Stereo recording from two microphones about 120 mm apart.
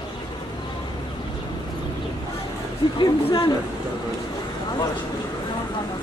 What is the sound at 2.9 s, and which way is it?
Speech, 35° left (ahead or behind).